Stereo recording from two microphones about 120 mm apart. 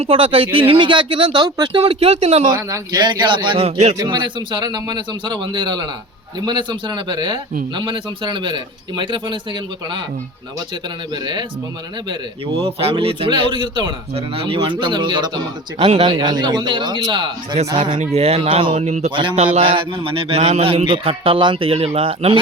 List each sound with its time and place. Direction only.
0.0 s a man's voice: 50° right (ahead or behind)
1.5 s a man's voice: 35° right (ahead or behind); by 2.5 s 65° right (ahead or behind)
2.5 s a man's voice: 25° right (ahead or behind); by 3.7 s 40° right (ahead or behind)
3.7 s speech: 65° right (ahead or behind)
3.9 s a man's voice: 35° right (ahead or behind)
11.1 s a man's voice: 40° right (ahead or behind)
12.6 s a man's voice: 55° right (ahead or behind)
14.1 s a man's voice: 50° right (ahead or behind)
15.8 s speech: 55° right (ahead or behind)
16.0 s a man's voice: 35° right (ahead or behind)
18.0 s speech: 60° right (ahead or behind)
18.7 s speech: 70° right (ahead or behind)
19.1 s a man's voice: 45° right (ahead or behind); by 20.8 s 60° right (ahead or behind)
20.8 s a man's voice: 45° right (ahead or behind)